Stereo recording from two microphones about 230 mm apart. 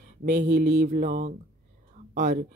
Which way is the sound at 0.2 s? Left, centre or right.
Right.